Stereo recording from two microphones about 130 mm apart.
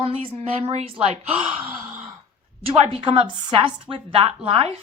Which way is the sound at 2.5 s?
45° right (ahead or behind).